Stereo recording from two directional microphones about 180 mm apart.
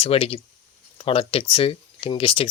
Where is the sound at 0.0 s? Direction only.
30° left (ahead or behind).